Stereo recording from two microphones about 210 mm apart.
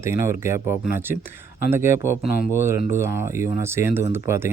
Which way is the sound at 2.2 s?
45° left (ahead or behind).